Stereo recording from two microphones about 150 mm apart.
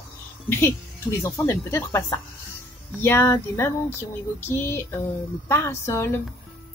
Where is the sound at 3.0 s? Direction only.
15° left (ahead or behind).